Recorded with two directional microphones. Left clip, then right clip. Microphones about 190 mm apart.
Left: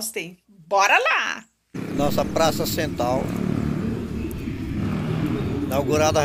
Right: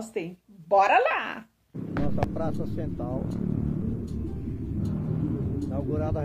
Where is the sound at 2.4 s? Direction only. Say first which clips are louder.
Left 11 dB; 20° left (ahead or behind).